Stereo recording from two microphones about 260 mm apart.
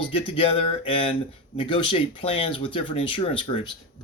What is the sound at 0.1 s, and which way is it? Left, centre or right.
Speech, centre.